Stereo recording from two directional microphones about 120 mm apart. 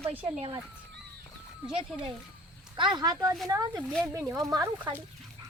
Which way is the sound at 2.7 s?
40° right (ahead or behind).